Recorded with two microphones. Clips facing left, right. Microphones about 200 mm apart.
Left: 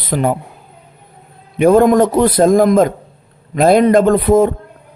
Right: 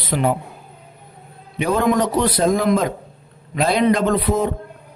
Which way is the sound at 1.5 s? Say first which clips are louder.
Left 9 dB; 50° left (ahead or behind).